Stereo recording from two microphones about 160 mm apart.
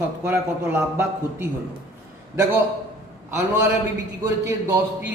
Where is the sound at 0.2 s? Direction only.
10° right (ahead or behind).